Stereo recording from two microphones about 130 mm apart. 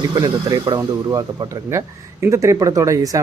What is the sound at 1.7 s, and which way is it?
Speech, 20° right (ahead or behind).